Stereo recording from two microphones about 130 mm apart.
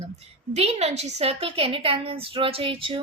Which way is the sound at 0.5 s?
55° right (ahead or behind).